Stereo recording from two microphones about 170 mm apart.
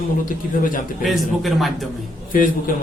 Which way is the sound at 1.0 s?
Centre (ahead or behind).